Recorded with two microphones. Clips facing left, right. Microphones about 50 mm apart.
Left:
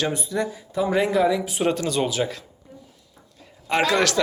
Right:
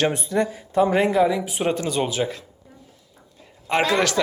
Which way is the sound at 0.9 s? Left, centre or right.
Right.